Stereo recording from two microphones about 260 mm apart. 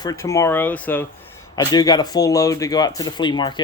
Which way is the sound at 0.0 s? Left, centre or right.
Centre.